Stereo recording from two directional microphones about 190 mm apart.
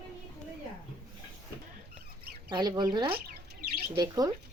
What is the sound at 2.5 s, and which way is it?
Speech, 20° right (ahead or behind).